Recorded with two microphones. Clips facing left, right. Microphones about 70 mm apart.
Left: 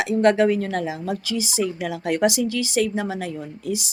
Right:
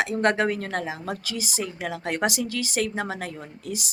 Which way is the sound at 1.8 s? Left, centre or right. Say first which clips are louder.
Left 3 dB; right.